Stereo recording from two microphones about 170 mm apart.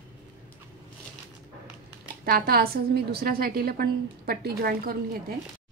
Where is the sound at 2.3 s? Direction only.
65° right (ahead or behind).